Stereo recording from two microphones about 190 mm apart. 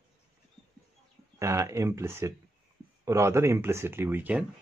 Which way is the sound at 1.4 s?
15° right (ahead or behind).